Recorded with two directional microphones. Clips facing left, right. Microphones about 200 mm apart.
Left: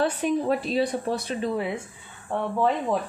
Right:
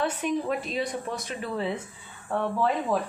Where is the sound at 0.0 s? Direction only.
35° left (ahead or behind).